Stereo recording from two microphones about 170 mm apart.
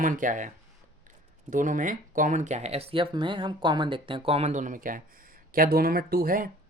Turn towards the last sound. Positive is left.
turn(degrees=-55)  # may be behind; listen again after turning